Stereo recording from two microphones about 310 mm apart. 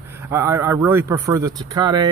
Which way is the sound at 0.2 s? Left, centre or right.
Centre.